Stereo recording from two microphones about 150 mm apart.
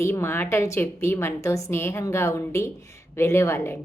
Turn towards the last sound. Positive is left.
turn(degrees=15)  # may be behind; listen again after turning